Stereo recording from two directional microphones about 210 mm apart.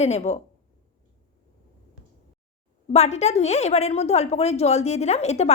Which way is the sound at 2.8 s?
30° left (ahead or behind).